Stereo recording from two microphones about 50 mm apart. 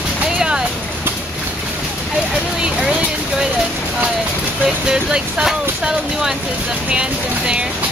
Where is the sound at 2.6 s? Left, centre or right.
Centre.